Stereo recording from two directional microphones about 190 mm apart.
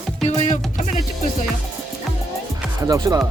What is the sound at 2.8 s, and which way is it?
Speech, 20° right (ahead or behind).